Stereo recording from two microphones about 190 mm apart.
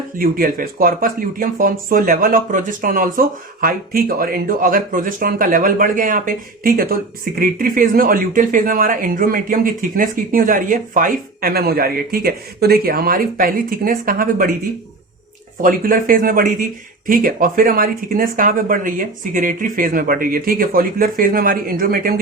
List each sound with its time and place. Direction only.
0.2 s speech: 50° right (ahead or behind)
15.6 s speech: 45° right (ahead or behind)